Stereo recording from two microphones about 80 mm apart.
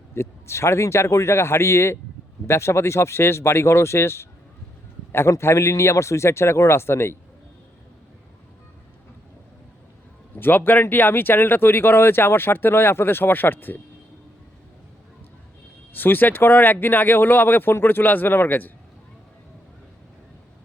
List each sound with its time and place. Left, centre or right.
0.1 s speech: left
10.3 s speech: left
15.9 s speech: left